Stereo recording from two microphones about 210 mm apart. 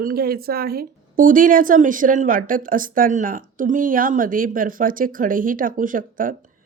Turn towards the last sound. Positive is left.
turn(degrees=-40)  # may be behind; listen again after turning